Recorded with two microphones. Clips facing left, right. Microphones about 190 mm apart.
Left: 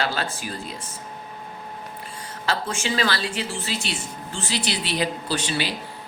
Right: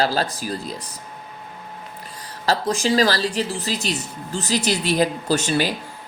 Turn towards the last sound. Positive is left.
turn(degrees=-45)  # may be behind; listen again after turning